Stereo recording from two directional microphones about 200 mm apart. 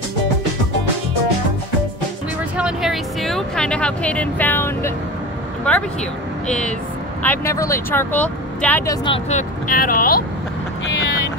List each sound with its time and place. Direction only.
2.5 s vehicle: 5° right (ahead or behind)
6.4 s speech: 5° left (ahead or behind)
9.0 s speech: 30° left (ahead or behind); by 10.2 s 45° left (ahead or behind)